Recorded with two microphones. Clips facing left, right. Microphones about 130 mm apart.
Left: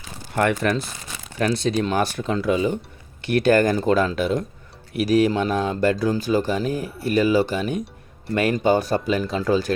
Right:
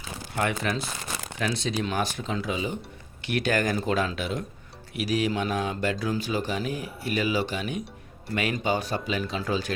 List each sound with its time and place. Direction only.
0.3 s speech: 55° left (ahead or behind)